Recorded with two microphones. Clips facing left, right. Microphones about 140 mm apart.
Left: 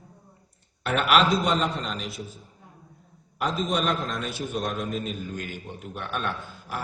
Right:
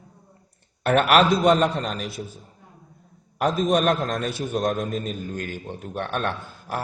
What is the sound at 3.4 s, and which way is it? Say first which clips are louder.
Speech: right 6 dB; 50° right (ahead or behind).